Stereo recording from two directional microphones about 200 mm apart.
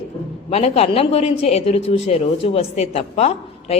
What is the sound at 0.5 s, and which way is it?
Speech, 35° left (ahead or behind).